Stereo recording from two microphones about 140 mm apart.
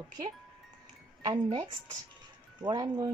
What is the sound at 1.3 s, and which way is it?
A woman's voice, 30° right (ahead or behind).